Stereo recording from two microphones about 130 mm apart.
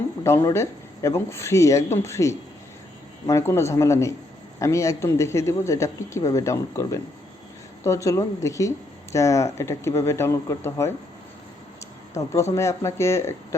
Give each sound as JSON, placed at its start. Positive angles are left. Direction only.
{"t": 0.3, "sound": "a man's voice", "side_deg": 20}
{"t": 12.1, "sound": "a man's voice", "side_deg": 20}